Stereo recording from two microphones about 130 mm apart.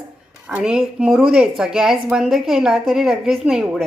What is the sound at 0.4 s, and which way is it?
A woman's voice, 10° right (ahead or behind).